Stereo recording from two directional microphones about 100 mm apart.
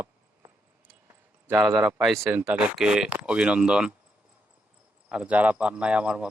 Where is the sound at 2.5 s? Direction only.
10° right (ahead or behind).